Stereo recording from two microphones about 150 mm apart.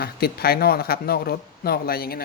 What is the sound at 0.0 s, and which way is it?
Speech, 90° left.